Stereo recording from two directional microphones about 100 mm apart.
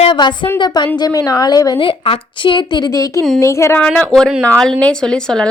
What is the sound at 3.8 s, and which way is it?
A woman's voice, 10° left (ahead or behind).